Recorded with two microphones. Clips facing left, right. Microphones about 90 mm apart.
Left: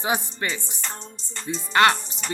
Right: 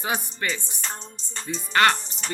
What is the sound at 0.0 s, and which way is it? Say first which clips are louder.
Speech: left 2 dB; 20° left (ahead or behind).